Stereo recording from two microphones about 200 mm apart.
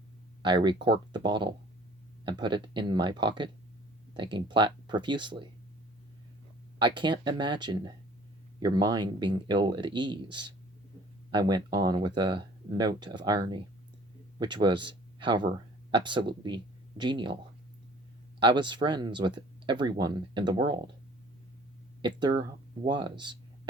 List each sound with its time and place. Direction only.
0.4 s speech: 25° right (ahead or behind)
6.7 s speech: 25° right (ahead or behind)
18.3 s speech: 25° right (ahead or behind)
22.0 s speech: 20° right (ahead or behind)